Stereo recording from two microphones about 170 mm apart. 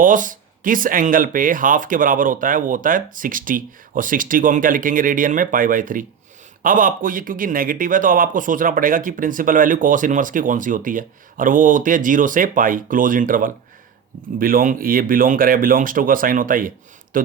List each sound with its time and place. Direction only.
0.0 s speech: 50° right (ahead or behind)